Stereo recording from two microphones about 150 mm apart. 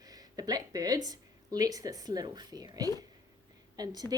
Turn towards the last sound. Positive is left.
turn(degrees=-25)  # may be behind; listen again after turning